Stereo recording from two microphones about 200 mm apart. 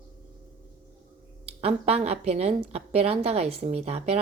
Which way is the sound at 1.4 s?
30° right (ahead or behind).